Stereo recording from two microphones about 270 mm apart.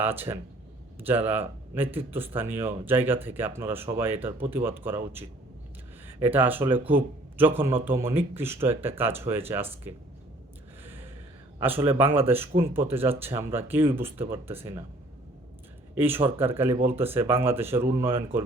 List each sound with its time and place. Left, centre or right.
0.0 s speech: centre
6.1 s a man's voice: centre
11.8 s speech: centre
16.0 s speech: centre